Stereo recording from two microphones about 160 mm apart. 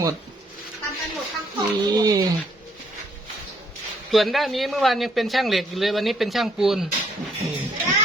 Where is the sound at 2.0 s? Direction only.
25° right (ahead or behind).